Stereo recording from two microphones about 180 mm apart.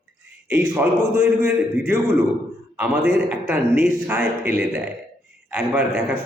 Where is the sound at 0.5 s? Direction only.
10° right (ahead or behind).